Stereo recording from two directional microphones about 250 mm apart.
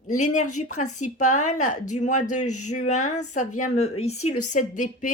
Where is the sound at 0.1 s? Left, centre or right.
Left.